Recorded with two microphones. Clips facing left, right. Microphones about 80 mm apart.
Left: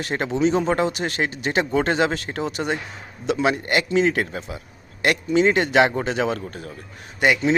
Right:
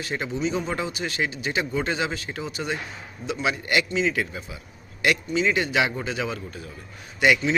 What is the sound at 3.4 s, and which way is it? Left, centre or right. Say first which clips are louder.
Speech: left 2 dB; left.